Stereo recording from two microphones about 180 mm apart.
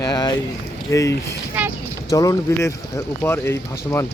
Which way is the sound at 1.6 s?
10° right (ahead or behind).